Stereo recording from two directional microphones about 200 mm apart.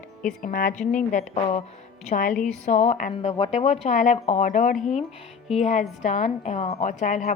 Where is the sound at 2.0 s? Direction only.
40° left (ahead or behind).